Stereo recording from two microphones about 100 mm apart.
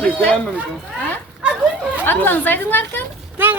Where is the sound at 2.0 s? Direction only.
20° left (ahead or behind).